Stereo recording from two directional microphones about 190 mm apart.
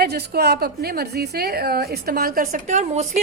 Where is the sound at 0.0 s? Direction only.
60° right (ahead or behind).